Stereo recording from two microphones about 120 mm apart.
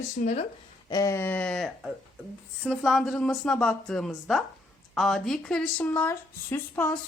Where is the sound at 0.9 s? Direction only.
30° left (ahead or behind).